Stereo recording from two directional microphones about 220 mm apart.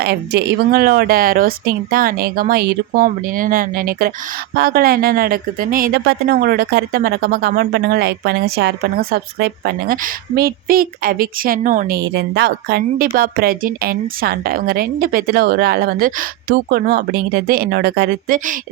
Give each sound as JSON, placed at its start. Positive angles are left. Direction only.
{"t": 0.0, "sound": "speech", "side_deg": -45}